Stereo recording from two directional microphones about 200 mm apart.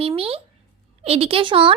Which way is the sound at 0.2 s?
30° right (ahead or behind).